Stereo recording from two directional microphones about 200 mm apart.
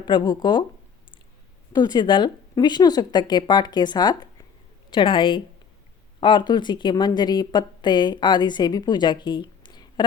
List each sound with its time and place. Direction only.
0.0 s speech: 20° left (ahead or behind)
1.7 s speech: 20° left (ahead or behind)